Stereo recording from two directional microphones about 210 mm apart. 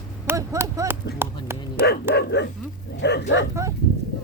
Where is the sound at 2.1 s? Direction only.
55° left (ahead or behind).